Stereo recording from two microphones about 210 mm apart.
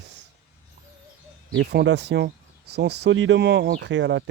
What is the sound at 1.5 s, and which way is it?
Speech, 55° right (ahead or behind).